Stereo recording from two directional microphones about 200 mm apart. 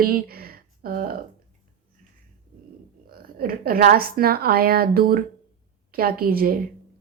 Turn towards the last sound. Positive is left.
turn(degrees=-50)  # may be behind; listen again after turning